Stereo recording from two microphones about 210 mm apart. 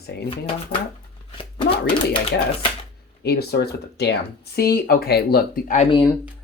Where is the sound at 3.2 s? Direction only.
50° left (ahead or behind).